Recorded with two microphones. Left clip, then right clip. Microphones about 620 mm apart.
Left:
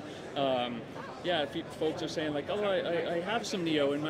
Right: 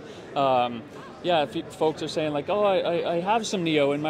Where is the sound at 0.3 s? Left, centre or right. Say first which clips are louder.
Right 8 dB; right.